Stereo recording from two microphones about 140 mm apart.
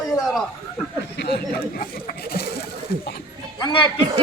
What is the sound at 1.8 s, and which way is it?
Speech, 90° left.